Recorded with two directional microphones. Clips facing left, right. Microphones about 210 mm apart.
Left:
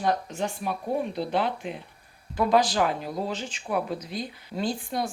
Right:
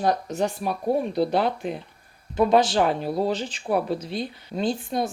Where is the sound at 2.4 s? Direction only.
25° right (ahead or behind).